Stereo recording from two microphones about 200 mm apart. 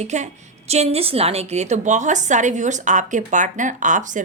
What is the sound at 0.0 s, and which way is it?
A woman's voice, 35° right (ahead or behind).